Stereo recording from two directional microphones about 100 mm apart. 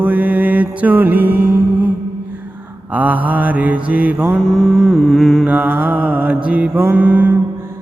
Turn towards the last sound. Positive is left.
turn(degrees=-15)  # may be behind; listen again after turning